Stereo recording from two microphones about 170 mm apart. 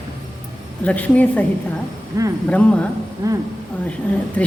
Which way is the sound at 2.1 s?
20° right (ahead or behind).